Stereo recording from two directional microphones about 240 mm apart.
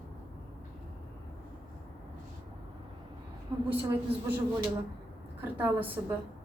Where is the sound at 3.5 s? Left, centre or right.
Centre.